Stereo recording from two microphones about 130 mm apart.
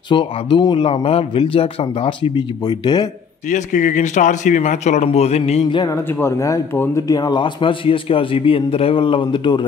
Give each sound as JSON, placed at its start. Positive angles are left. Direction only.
{"t": 0.1, "sound": "a man's voice", "side_deg": 40}
{"t": 0.8, "sound": "speech", "side_deg": 45}
{"t": 3.4, "sound": "speech", "side_deg": 80}
{"t": 6.1, "sound": "a man's voice", "side_deg": 20}